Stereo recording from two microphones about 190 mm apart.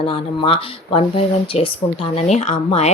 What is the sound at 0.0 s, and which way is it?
Speech, 30° left (ahead or behind).